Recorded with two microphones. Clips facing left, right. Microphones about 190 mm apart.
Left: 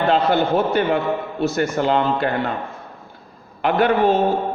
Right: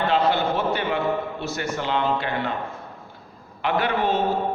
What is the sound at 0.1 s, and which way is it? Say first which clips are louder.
A man's voice: left 5 dB; 50° left (ahead or behind).